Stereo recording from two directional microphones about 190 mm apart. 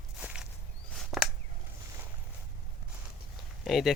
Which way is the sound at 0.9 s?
Centre (ahead or behind).